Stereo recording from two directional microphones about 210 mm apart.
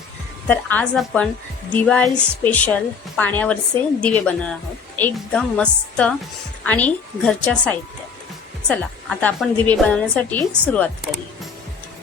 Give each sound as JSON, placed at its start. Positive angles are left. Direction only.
{"t": 0.4, "sound": "a woman's voice", "side_deg": 5}